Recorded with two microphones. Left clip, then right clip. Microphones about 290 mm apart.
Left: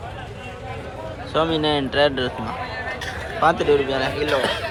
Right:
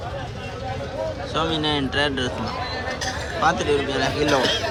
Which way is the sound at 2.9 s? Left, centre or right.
Right.